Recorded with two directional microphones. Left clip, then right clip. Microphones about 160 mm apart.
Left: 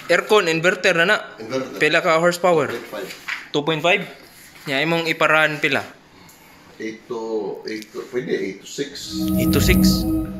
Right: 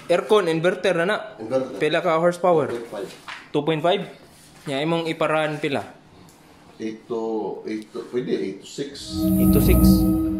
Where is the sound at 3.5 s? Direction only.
20° right (ahead or behind).